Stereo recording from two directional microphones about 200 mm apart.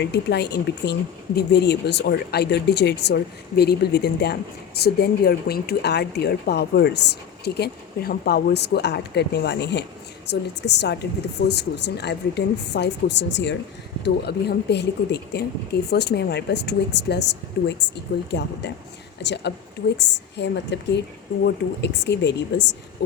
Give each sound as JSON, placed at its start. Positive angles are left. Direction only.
{"t": 0.0, "sound": "speech", "side_deg": 60}